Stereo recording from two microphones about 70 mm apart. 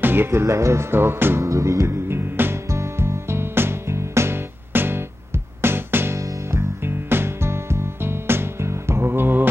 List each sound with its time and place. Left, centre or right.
0.0 s music: right
0.4 s speech: right
1.4 s music: right
6.1 s music: right
6.8 s music: right